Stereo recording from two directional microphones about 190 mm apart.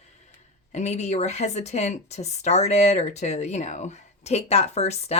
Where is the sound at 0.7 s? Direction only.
35° left (ahead or behind).